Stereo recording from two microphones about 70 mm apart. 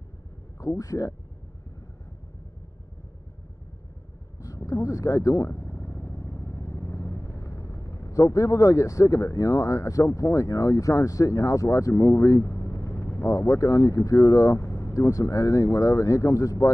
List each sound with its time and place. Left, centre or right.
0.6 s speech: left
4.4 s speech: left